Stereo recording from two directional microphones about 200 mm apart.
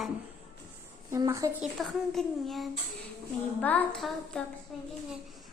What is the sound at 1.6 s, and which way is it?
Speech, centre (ahead or behind).